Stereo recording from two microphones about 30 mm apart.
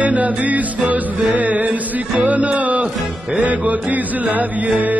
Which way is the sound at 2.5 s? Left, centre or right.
Right.